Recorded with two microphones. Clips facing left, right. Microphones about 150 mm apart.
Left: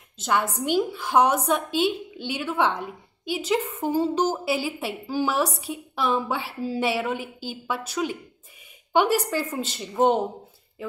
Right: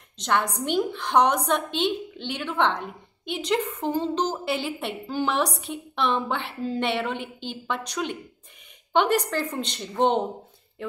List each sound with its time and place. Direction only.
0.2 s a woman's voice: 5° left (ahead or behind)